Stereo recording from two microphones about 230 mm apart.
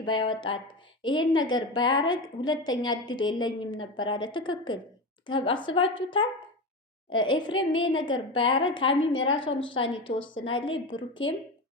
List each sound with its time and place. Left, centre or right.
0.0 s a woman's voice: centre